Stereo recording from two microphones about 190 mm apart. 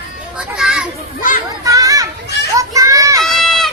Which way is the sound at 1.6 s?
20° right (ahead or behind).